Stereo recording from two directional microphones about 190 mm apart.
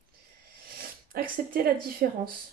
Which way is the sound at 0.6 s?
50° right (ahead or behind).